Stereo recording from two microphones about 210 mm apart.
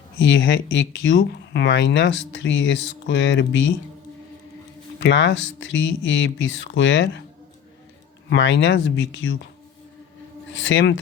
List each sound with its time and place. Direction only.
0.2 s speech: 60° left (ahead or behind)
4.9 s speech: 60° left (ahead or behind)
8.3 s speech: 60° left (ahead or behind)
10.5 s speech: 65° left (ahead or behind)